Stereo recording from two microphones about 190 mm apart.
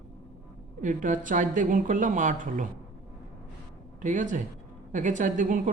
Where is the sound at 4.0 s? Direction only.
40° right (ahead or behind).